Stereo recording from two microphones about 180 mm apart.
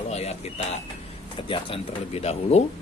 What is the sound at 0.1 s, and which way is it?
Bird, 35° left (ahead or behind).